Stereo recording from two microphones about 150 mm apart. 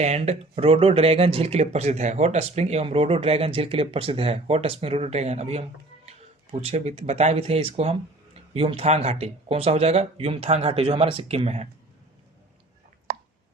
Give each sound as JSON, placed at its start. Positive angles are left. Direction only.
{"t": 0.0, "sound": "speech", "side_deg": -45}